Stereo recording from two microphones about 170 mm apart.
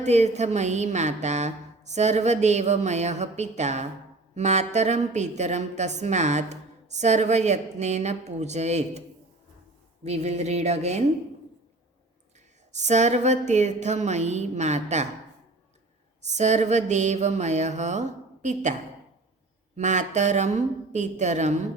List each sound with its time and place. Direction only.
0.0 s a sound: 40° right (ahead or behind)
4.4 s a woman's voice: 40° right (ahead or behind)
10.0 s a sound: 40° right (ahead or behind)
12.7 s a woman's voice: 45° right (ahead or behind)
16.2 s a woman's voice: 40° right (ahead or behind)
19.7 s a woman's voice: 45° right (ahead or behind)